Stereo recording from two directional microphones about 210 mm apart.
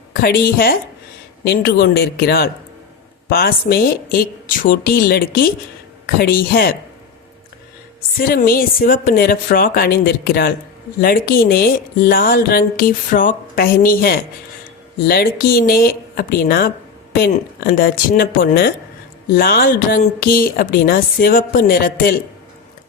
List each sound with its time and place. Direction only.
0.1 s speech: 45° left (ahead or behind)
8.2 s speech: 45° left (ahead or behind)